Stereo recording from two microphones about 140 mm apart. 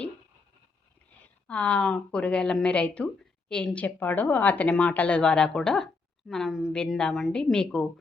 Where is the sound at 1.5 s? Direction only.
10° left (ahead or behind).